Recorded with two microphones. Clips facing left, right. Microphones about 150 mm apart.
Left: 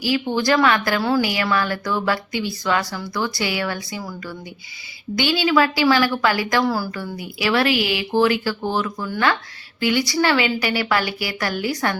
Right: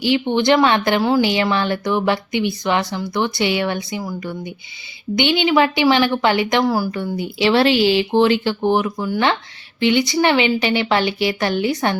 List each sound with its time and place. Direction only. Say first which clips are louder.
0.0 s a woman's voice: right 4 dB; 25° right (ahead or behind)